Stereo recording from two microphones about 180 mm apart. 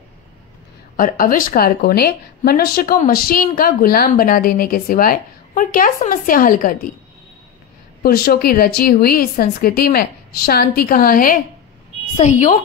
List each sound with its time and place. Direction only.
0.9 s a woman's voice: 50° left (ahead or behind)
8.0 s a woman's voice: 60° left (ahead or behind)
12.2 s speech: 40° left (ahead or behind)